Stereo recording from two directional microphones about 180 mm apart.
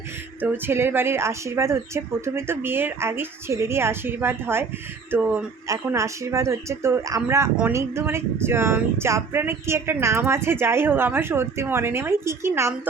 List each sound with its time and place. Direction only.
0.4 s speech: 10° right (ahead or behind)